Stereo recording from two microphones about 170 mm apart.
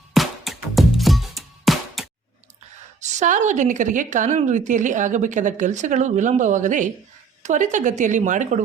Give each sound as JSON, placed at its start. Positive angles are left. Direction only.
{"t": 0.1, "sound": "music", "side_deg": 0}
{"t": 3.0, "sound": "a woman's voice", "side_deg": -45}